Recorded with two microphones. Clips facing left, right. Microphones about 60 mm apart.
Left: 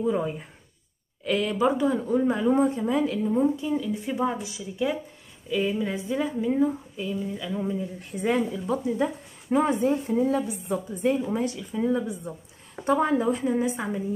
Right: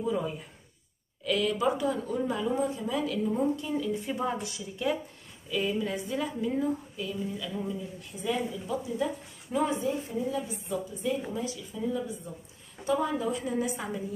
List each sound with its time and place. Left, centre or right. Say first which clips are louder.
0.1 s speech: left 4 dB; left
3.6 s a woman's voice: left 3 dB; centre
8.1 s a woman's voice: left 6 dB; left
13.2 s speech: left 6 dB; left